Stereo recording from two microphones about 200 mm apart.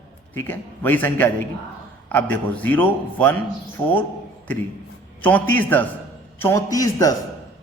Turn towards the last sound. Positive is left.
turn(degrees=15)  # may be behind; listen again after turning